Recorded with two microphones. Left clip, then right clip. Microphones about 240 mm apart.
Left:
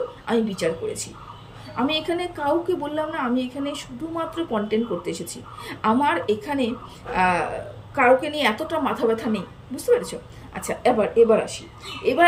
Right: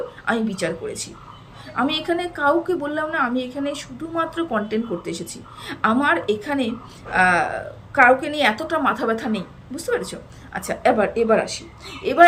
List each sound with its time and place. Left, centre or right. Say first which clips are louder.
0.3 s a woman's voice: even; centre